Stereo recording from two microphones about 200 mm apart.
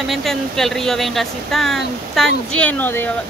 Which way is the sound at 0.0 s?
Centre (ahead or behind).